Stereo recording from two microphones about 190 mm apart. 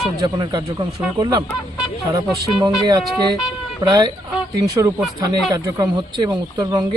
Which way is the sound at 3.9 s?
20° right (ahead or behind).